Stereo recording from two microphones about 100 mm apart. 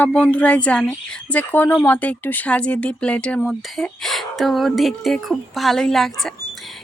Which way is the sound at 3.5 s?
Centre (ahead or behind).